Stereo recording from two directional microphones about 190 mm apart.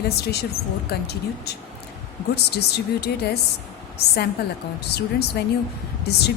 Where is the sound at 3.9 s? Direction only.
60° left (ahead or behind).